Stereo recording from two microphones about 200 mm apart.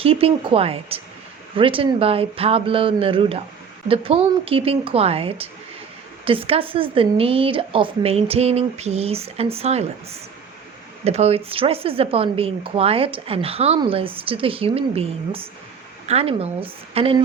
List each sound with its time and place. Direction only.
0.0 s speech: 30° right (ahead or behind)